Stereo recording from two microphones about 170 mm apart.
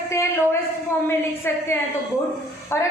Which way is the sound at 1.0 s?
15° left (ahead or behind).